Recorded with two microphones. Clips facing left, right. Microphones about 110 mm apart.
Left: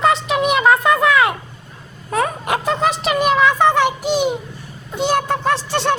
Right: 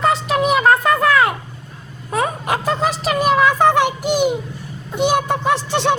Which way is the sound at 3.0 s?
Centre (ahead or behind).